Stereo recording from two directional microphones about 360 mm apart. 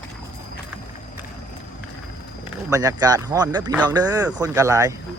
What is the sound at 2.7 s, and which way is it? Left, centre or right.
Speech, centre.